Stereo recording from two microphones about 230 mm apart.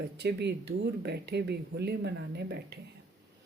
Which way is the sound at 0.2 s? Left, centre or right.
Right.